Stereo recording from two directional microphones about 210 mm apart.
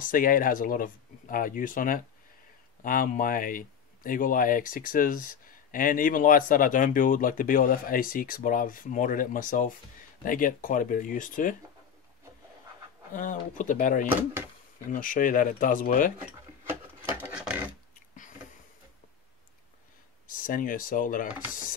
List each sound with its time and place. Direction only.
0.0 s speech: 40° left (ahead or behind)
13.1 s speech: 40° left (ahead or behind)
17.2 s a sound: 10° right (ahead or behind)
20.2 s speech: 40° left (ahead or behind)